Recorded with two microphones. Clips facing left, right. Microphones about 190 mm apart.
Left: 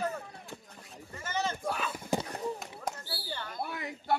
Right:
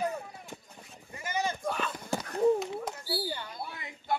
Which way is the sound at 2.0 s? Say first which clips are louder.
Left 2 dB; 15° left (ahead or behind).